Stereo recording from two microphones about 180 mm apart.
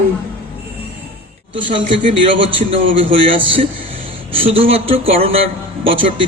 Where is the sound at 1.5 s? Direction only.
25° right (ahead or behind).